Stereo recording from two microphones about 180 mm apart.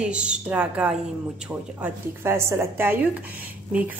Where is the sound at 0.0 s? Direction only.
5° right (ahead or behind).